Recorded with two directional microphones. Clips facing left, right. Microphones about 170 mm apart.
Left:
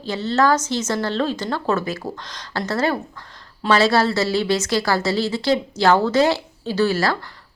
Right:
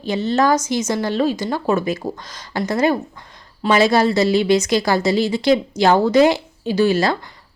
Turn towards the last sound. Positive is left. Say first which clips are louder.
# right 3 dB
turn(degrees=-20)  # may be behind; listen again after turning